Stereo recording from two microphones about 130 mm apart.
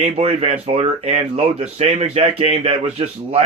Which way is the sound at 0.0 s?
55° right (ahead or behind).